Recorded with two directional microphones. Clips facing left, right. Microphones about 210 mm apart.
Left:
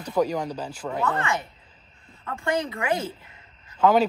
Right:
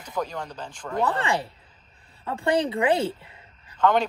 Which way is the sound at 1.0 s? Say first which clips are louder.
Right 2 dB; 35° right (ahead or behind).